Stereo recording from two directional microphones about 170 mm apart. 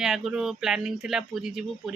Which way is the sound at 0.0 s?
Centre (ahead or behind).